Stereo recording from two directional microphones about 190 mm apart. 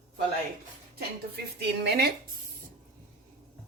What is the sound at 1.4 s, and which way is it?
Speech, 60° right (ahead or behind).